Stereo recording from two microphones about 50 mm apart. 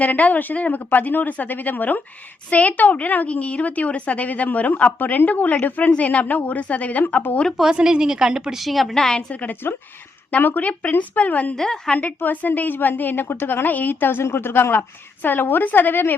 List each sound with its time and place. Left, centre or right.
0.0 s a woman's voice: left
7.5 s a woman's voice: centre
8.6 s a woman's voice: centre
9.3 s a woman's voice: left
11.5 s a woman's voice: centre
11.9 s a woman's voice: left